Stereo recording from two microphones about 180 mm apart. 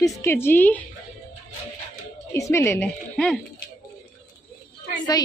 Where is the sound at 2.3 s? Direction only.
15° left (ahead or behind).